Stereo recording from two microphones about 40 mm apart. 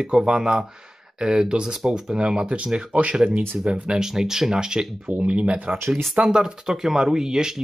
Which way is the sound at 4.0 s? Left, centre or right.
Centre.